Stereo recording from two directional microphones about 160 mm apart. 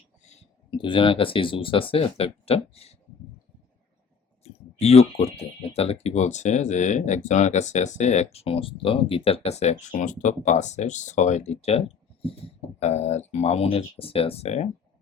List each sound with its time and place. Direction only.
0.7 s speech: 30° left (ahead or behind)
4.4 s speech: 40° left (ahead or behind)